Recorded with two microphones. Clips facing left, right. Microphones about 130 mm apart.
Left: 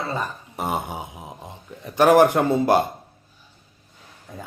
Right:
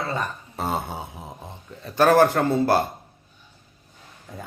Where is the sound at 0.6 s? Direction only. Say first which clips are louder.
Left 1 dB; 15° left (ahead or behind).